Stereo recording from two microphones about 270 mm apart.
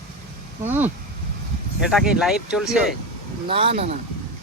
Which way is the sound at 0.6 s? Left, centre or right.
Centre.